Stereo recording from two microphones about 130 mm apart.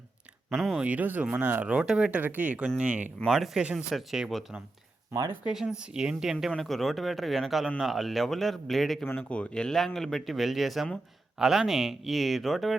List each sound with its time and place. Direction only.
0.5 s a man's voice: centre (ahead or behind)
5.1 s speech: 25° right (ahead or behind)
5.5 s a man's voice: 5° right (ahead or behind)